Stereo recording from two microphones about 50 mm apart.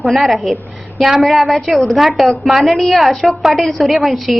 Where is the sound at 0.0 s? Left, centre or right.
Centre.